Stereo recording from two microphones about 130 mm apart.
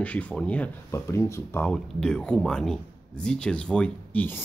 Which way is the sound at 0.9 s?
20° left (ahead or behind).